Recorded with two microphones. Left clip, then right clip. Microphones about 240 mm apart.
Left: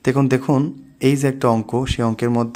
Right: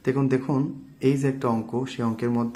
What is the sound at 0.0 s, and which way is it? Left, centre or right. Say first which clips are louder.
A man's voice: left 6 dB; left.